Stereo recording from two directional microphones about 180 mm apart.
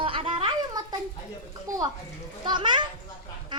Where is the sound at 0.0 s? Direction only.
30° right (ahead or behind).